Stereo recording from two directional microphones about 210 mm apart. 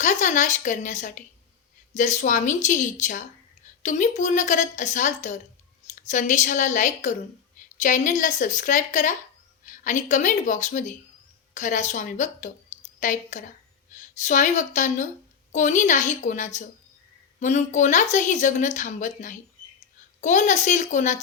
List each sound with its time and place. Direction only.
0.0 s speech: 35° left (ahead or behind)